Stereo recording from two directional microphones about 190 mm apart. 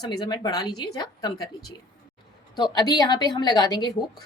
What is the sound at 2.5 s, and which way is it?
Speech, 20° left (ahead or behind).